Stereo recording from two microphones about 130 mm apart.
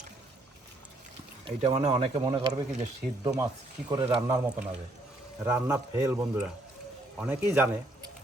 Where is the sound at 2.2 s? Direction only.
30° right (ahead or behind).